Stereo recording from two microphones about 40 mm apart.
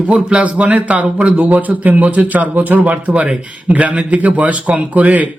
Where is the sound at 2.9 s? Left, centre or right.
Right.